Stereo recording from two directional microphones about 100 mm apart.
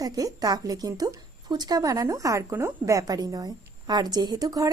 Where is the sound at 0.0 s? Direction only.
40° right (ahead or behind).